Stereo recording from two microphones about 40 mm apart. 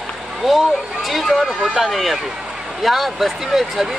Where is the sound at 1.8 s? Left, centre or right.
Centre.